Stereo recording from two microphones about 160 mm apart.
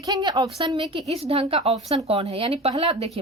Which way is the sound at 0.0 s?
25° right (ahead or behind).